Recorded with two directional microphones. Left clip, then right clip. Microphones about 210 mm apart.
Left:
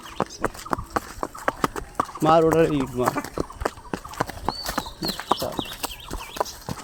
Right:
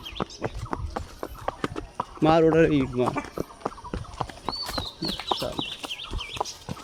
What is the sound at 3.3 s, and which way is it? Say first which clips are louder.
Clip-clop: left 4 dB; 50° left (ahead or behind).